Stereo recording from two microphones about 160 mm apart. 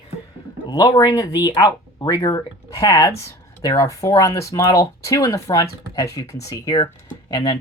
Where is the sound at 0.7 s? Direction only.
30° left (ahead or behind).